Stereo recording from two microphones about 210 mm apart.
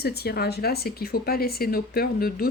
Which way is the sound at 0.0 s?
50° left (ahead or behind).